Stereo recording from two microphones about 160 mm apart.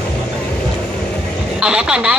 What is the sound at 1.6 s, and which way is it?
Vehicle, 5° right (ahead or behind).